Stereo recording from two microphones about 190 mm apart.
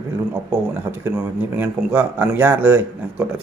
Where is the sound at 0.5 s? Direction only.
10° right (ahead or behind).